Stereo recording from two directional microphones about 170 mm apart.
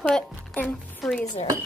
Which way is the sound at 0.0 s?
5° left (ahead or behind).